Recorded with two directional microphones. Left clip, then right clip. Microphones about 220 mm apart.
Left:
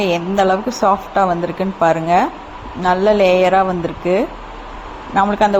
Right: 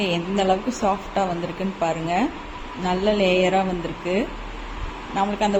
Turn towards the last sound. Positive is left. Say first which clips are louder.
# left 9 dB
turn(degrees=20)  # may be behind; listen again after turning